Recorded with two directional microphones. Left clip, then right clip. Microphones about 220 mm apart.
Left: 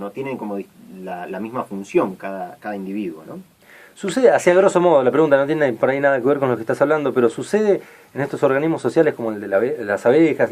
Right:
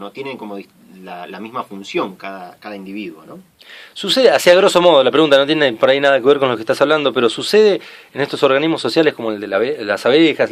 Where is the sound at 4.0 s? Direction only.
40° right (ahead or behind).